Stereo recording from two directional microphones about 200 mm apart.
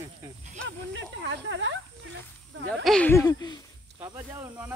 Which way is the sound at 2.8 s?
5° left (ahead or behind).